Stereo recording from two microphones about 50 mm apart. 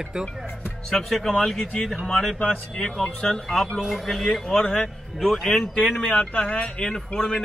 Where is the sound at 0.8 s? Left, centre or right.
Centre.